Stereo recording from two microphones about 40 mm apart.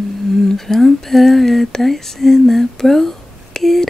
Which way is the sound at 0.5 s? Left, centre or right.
Centre.